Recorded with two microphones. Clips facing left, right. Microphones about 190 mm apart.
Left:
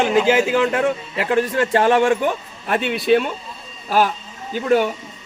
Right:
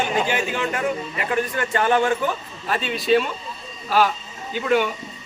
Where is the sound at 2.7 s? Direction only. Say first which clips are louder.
Left 3 dB; 60° left (ahead or behind).